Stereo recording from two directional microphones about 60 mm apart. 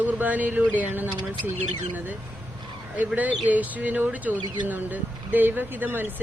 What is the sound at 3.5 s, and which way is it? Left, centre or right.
Speech, right.